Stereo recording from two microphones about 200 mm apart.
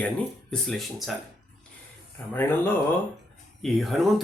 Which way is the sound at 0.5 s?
5° left (ahead or behind).